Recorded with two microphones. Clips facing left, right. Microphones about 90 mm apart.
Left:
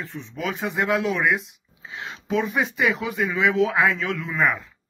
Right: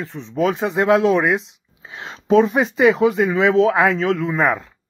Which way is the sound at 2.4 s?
55° right (ahead or behind).